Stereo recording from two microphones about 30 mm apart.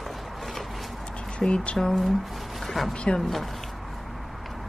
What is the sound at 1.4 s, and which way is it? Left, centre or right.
Music, centre.